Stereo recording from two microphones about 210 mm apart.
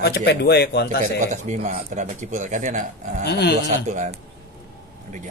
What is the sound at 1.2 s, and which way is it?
Speech, 35° right (ahead or behind).